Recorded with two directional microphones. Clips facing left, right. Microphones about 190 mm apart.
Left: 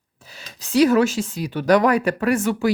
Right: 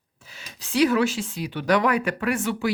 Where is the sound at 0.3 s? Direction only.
40° left (ahead or behind).